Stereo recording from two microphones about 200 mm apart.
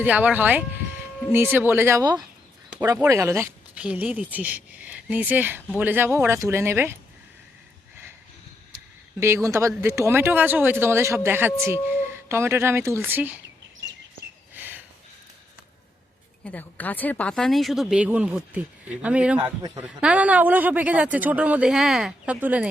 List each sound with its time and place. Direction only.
0.0 s speech: 10° right (ahead or behind)
9.2 s speech: 15° right (ahead or behind)
14.5 s a sound: 10° right (ahead or behind)
16.4 s speech: 5° left (ahead or behind)
19.4 s a man's voice: 20° right (ahead or behind)
20.0 s speech: 5° right (ahead or behind)